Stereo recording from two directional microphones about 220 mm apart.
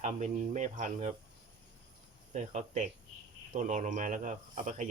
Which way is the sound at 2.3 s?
35° right (ahead or behind).